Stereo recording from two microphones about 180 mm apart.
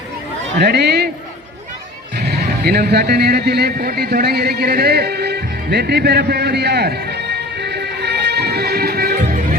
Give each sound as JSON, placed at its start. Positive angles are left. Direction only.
{"t": 0.6, "sound": "a man's voice", "side_deg": -65}
{"t": 2.1, "sound": "a sound", "side_deg": -60}
{"t": 9.2, "sound": "music", "side_deg": -50}